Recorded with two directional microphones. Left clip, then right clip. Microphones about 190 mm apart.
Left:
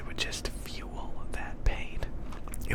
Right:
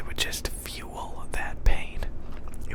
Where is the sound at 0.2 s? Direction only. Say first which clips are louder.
Right 4 dB; 10° right (ahead or behind).